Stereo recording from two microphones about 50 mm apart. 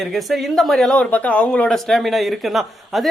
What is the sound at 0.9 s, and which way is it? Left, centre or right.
Speech, left.